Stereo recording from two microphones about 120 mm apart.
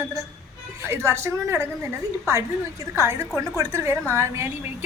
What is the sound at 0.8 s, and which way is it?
Speech, 20° right (ahead or behind).